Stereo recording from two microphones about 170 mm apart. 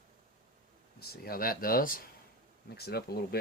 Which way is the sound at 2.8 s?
70° left (ahead or behind).